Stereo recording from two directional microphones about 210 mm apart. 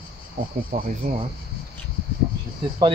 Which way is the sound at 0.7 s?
45° right (ahead or behind).